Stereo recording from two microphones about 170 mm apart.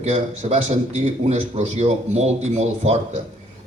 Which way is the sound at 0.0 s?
40° right (ahead or behind).